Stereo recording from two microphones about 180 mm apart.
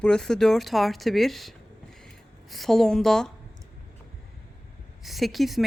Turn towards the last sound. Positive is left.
turn(degrees=0)  # may be behind; listen again after turning